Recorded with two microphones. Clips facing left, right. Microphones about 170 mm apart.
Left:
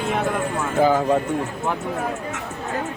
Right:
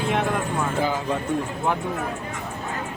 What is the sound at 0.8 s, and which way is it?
Speech, 50° left (ahead or behind).